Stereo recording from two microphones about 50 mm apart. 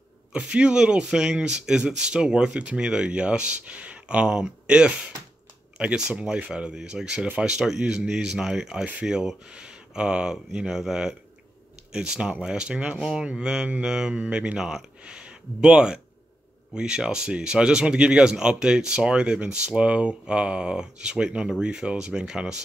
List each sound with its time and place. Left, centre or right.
0.3 s speech: right